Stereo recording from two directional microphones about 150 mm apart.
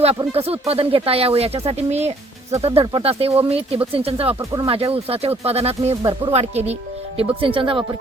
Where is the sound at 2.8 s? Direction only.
35° right (ahead or behind).